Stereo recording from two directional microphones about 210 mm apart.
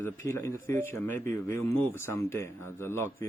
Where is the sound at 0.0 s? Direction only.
10° left (ahead or behind).